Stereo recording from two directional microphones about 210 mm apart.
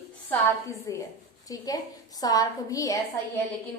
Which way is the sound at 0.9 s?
15° left (ahead or behind).